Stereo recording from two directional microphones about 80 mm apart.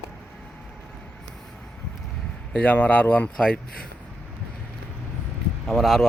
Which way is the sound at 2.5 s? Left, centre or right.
Centre.